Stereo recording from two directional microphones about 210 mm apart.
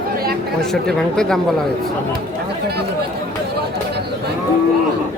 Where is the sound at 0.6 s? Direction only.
5° left (ahead or behind).